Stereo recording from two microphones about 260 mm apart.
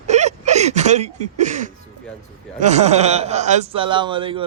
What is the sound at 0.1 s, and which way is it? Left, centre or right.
A man's voice, right.